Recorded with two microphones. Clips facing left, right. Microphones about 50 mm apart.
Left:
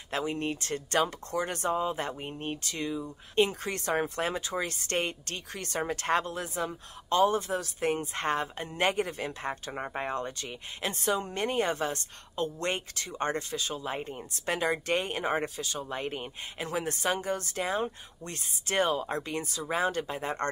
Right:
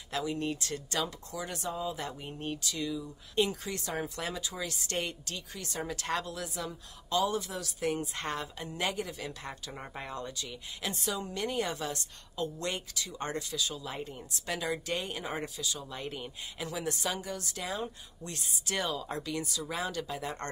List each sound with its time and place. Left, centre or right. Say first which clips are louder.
0.1 s speech: left 2 dB; left